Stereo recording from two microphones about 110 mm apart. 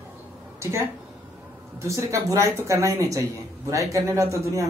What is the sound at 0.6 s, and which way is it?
Speech, 25° right (ahead or behind).